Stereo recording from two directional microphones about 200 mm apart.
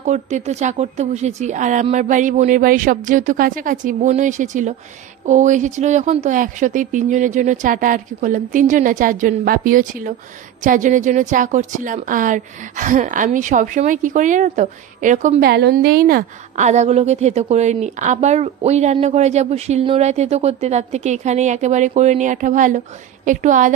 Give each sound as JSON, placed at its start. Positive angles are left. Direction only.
{"t": 0.0, "sound": "a woman's voice", "side_deg": -35}
{"t": 15.5, "sound": "a woman's voice", "side_deg": -55}